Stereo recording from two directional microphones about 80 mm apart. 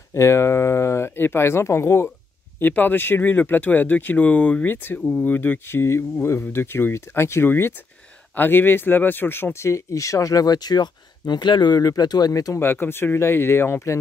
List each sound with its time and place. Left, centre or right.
0.1 s speech: left
12.5 s speech: left